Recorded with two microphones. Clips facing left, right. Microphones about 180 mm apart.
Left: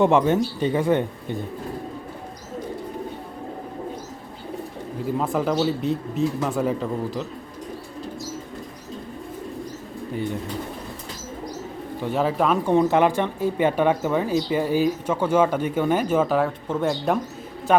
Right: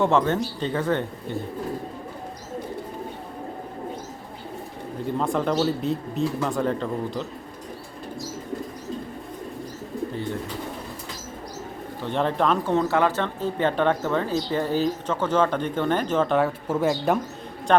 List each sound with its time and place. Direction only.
0.0 s speech: 15° left (ahead or behind)
5.0 s speech: 5° left (ahead or behind)
12.0 s speech: 5° left (ahead or behind)
16.6 s speech: 5° right (ahead or behind)
17.7 s a sound: 5° left (ahead or behind)